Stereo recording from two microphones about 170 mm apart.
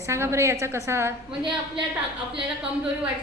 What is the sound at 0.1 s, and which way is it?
A woman's voice, 15° right (ahead or behind).